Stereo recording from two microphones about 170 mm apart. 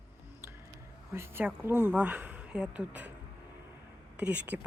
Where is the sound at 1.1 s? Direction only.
15° right (ahead or behind).